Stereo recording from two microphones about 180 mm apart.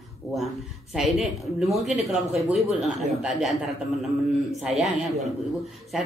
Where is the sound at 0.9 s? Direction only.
Centre (ahead or behind).